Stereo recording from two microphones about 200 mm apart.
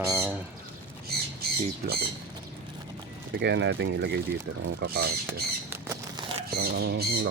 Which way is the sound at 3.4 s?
60° right (ahead or behind).